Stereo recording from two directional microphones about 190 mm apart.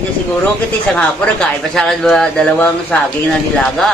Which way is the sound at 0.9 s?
5° left (ahead or behind).